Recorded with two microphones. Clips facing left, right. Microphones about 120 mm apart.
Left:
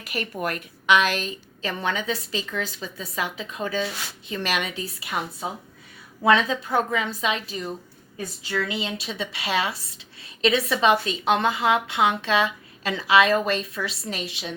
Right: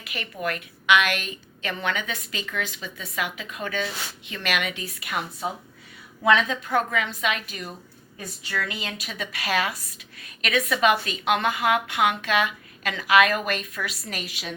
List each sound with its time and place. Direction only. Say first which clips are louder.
0.1 s a woman's voice: left 2 dB; 40° left (ahead or behind)
6.2 s speech: left 1 dB; 30° left (ahead or behind)